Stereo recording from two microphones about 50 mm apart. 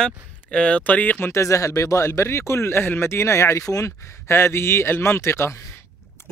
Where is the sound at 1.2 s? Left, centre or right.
Left.